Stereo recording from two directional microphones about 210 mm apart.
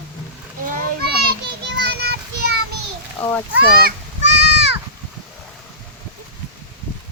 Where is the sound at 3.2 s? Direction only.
10° left (ahead or behind).